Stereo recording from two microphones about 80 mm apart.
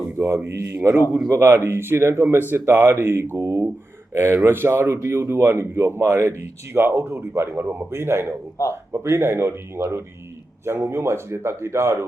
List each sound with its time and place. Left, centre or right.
0.2 s a man's voice: right